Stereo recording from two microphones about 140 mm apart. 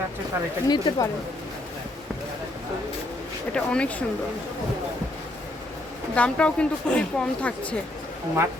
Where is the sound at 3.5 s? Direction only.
10° left (ahead or behind).